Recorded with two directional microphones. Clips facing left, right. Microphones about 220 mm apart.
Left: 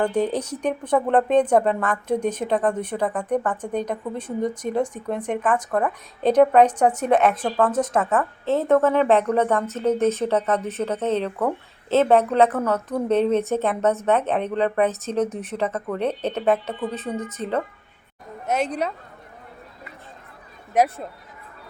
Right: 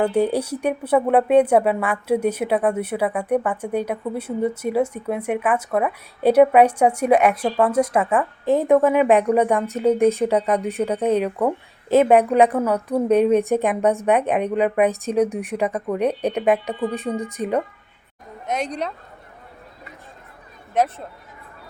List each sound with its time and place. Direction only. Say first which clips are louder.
0.0 s speech: right 3 dB; 10° right (ahead or behind)
18.4 s a woman's voice: left 2 dB; 5° left (ahead or behind)
20.7 s speech: left 1 dB; 10° left (ahead or behind)